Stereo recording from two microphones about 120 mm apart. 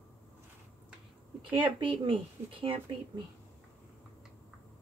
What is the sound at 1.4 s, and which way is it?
A woman's voice, 45° right (ahead or behind).